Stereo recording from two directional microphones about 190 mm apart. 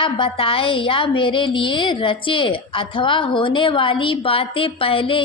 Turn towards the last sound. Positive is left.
turn(degrees=30)  # may be behind; listen again after turning